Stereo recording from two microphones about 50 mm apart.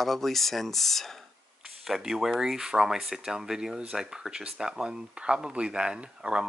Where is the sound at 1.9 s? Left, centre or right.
Centre.